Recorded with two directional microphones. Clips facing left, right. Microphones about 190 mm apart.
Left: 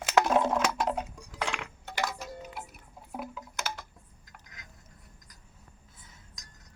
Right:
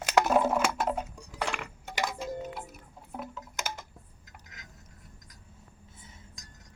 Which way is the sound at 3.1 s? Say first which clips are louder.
Left 1 dB; 5° left (ahead or behind).